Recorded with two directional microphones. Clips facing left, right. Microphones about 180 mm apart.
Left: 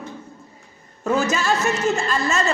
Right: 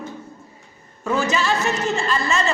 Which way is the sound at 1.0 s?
40° left (ahead or behind).